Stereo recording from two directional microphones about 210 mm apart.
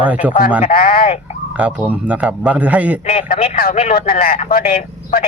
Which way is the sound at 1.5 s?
5° right (ahead or behind).